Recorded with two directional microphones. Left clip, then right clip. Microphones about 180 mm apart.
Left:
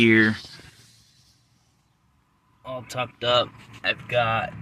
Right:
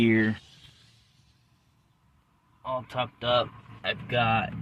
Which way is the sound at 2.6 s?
10° right (ahead or behind).